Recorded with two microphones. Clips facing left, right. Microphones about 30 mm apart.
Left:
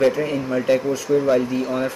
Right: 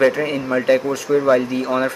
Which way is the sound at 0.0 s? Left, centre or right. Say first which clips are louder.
Right 2 dB; right.